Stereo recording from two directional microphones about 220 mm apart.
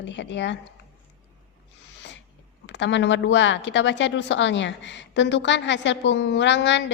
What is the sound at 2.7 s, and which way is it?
Speech, 55° left (ahead or behind).